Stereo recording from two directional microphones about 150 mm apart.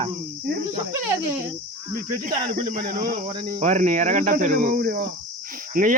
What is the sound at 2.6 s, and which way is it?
Speech, 75° right (ahead or behind).